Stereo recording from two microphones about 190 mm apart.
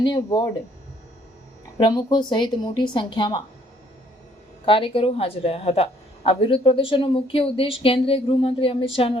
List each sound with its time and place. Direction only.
0.0 s a woman's voice: 20° left (ahead or behind)
1.8 s a woman's voice: 20° left (ahead or behind)
4.6 s a woman's voice: 30° left (ahead or behind)